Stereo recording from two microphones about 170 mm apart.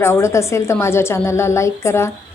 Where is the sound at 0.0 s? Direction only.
15° left (ahead or behind).